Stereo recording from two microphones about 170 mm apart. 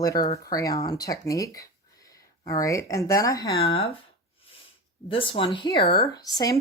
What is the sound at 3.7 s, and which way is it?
Speech, 35° left (ahead or behind).